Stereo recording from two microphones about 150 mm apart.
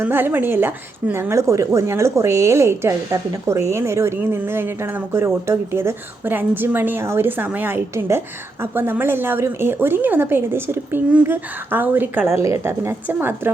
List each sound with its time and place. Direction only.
0.0 s speech: 15° right (ahead or behind)